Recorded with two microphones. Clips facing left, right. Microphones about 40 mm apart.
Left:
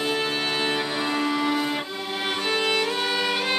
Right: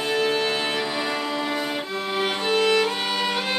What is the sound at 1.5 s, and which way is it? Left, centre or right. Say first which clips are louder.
Music: left 1 dB; centre.